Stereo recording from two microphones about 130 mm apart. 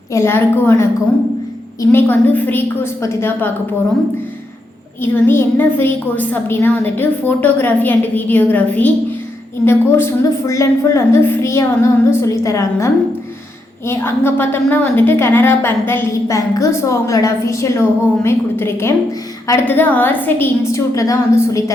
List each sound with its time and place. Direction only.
0.1 s a woman's voice: 20° left (ahead or behind)
4.9 s a woman's voice: 20° left (ahead or behind)